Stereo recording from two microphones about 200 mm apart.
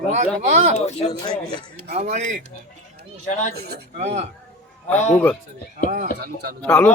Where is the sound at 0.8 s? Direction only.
30° left (ahead or behind).